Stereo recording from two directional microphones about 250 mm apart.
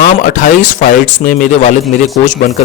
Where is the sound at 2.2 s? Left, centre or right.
Left.